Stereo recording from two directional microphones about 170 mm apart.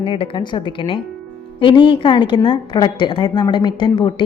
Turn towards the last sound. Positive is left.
turn(degrees=30)  # may be behind; listen again after turning